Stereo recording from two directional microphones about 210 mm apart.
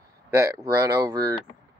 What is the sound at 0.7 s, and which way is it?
Speech, 15° right (ahead or behind).